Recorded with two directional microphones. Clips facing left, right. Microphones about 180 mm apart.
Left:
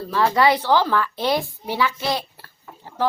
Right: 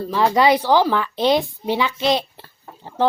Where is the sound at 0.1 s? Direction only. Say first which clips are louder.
Right 2 dB; 15° right (ahead or behind).